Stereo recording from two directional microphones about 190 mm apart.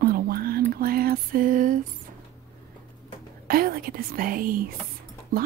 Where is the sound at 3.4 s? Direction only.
50° right (ahead or behind).